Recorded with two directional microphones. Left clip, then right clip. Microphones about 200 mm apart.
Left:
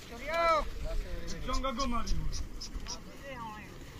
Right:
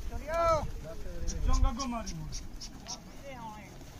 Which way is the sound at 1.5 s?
35° right (ahead or behind).